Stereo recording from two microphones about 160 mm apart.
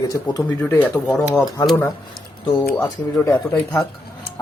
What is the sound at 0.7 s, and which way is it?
Speech, 10° left (ahead or behind).